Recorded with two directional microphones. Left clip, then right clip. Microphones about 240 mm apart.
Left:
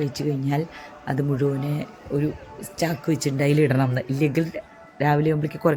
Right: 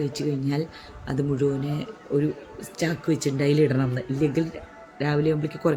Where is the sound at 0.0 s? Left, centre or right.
Centre.